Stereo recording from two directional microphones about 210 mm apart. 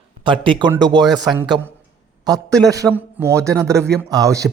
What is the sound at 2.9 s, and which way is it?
Speech, 10° right (ahead or behind).